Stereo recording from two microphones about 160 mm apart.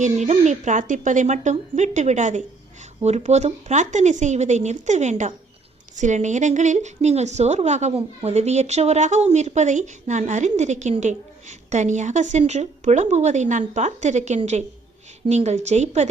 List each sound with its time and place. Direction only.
0.0 s a woman's voice: 45° right (ahead or behind)